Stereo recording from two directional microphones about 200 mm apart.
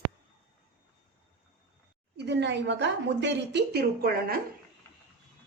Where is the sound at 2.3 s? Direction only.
60° right (ahead or behind).